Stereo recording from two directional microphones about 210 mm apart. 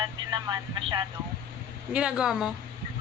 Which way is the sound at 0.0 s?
20° right (ahead or behind).